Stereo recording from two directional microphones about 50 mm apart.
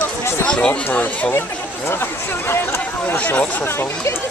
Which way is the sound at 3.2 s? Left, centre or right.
Left.